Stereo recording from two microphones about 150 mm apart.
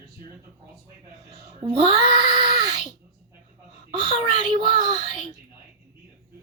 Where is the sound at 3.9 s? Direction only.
30° right (ahead or behind).